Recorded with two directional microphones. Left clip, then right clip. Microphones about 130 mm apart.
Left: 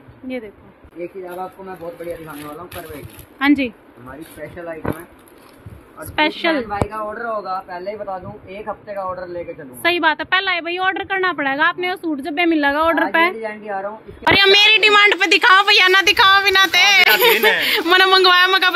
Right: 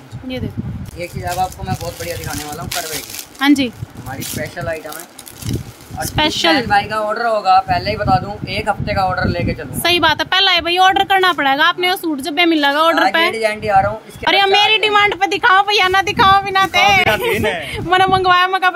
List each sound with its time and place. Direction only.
3.3 s a woman's voice: 35° right (ahead or behind)
6.1 s speech: 45° right (ahead or behind)
9.8 s a woman's voice: 30° right (ahead or behind)
13.4 s speech: 80° right
14.2 s a woman's voice: 20° right (ahead or behind)